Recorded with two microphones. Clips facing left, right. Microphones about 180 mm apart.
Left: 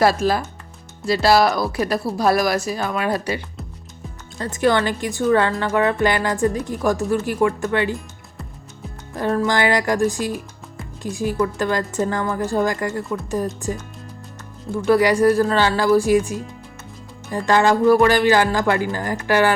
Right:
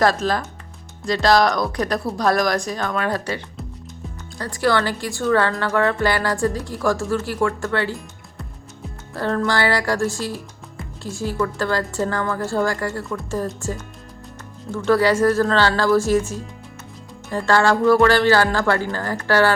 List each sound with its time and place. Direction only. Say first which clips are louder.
0.0 s speech: left 2 dB; 10° left (ahead or behind)
9.1 s speech: left 1 dB; 15° left (ahead or behind)
14.8 s speech: left 1 dB; 15° left (ahead or behind)